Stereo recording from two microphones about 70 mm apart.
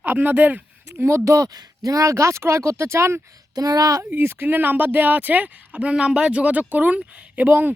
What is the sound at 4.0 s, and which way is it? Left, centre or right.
Speech, right.